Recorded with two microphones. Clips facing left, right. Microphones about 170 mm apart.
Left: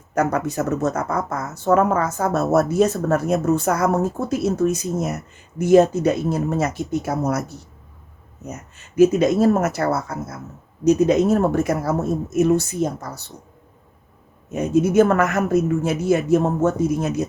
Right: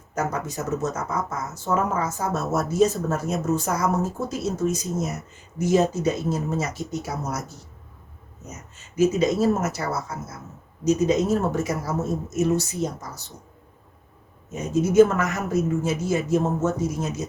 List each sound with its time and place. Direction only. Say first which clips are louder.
0.1 s speech: left 7 dB; 65° left (ahead or behind)
14.5 s speech: left 2 dB; 60° left (ahead or behind)